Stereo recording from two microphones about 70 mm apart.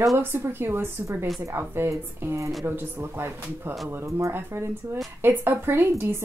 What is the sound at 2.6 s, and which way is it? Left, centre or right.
Speech, right.